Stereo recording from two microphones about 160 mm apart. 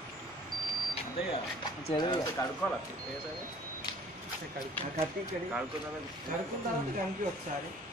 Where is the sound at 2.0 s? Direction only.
25° left (ahead or behind).